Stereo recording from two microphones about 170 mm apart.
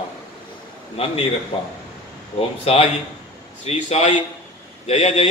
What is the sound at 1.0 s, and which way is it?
A man's voice, 35° left (ahead or behind).